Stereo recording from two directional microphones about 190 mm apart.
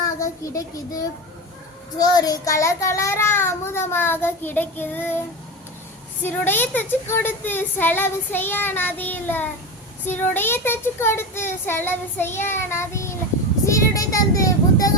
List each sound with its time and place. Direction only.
0.2 s child singing: 15° left (ahead or behind)
6.2 s child singing: 10° left (ahead or behind)